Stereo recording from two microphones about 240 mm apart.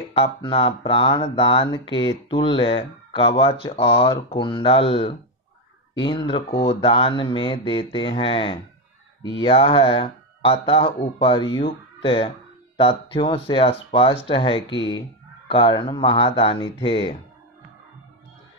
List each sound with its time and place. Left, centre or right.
0.1 s speech: left